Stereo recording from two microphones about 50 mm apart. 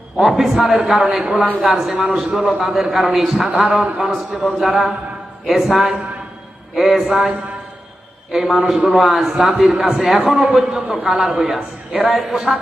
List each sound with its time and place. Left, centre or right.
0.2 s a man's voice: centre
7.1 s a man's voice: right
8.3 s a man's voice: centre
9.3 s a man's voice: centre
9.6 s a man's voice: centre